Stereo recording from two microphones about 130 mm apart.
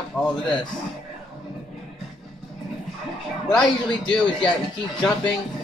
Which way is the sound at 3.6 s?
35° left (ahead or behind).